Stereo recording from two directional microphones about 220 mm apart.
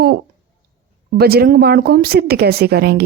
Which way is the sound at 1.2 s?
45° right (ahead or behind).